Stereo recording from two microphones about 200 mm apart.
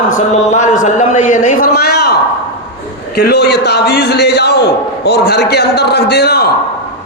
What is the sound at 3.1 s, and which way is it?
A man's voice, 55° left (ahead or behind).